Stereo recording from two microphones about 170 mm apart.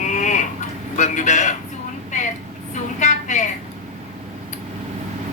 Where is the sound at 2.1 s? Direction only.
45° left (ahead or behind).